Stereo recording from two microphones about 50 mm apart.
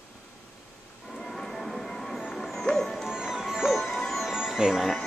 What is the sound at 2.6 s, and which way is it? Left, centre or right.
Music, centre.